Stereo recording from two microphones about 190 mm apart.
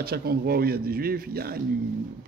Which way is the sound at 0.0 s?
55° right (ahead or behind).